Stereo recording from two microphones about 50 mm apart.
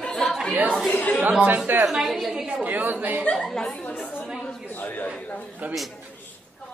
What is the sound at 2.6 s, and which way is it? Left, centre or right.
Speech, right.